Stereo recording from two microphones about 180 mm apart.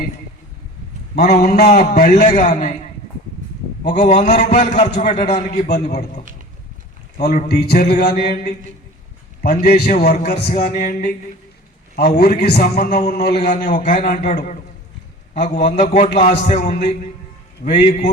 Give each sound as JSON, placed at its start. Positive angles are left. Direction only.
{"t": 1.2, "sound": "a man's voice", "side_deg": 60}
{"t": 3.8, "sound": "a man's voice", "side_deg": 40}
{"t": 5.6, "sound": "a man's voice", "side_deg": 60}
{"t": 7.2, "sound": "a man's voice", "side_deg": 50}